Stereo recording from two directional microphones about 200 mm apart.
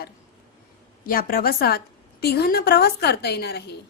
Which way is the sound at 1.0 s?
45° left (ahead or behind).